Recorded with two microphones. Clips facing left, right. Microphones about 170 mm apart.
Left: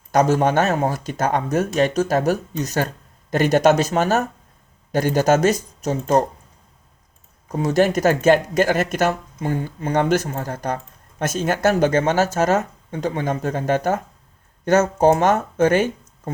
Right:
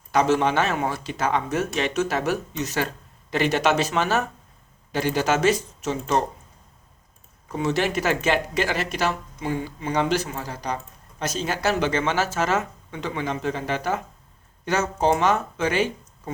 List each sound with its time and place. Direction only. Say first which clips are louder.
0.1 s speech: left 3 dB; 40° left (ahead or behind)
7.4 s speech: left 6 dB; 40° left (ahead or behind)